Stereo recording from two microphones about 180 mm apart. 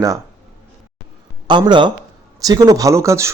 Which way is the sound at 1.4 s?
25° right (ahead or behind).